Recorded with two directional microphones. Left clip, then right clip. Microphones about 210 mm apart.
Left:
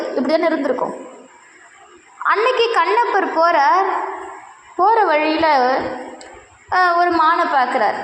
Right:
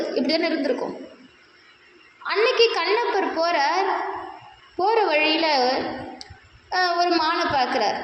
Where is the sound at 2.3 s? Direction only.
15° left (ahead or behind).